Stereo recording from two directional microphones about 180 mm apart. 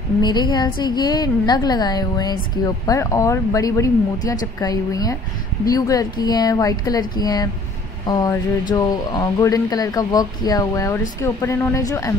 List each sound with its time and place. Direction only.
0.2 s a woman's voice: 25° left (ahead or behind)